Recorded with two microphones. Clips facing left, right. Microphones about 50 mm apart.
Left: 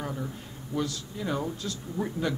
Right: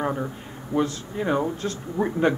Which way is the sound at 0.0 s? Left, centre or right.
Right.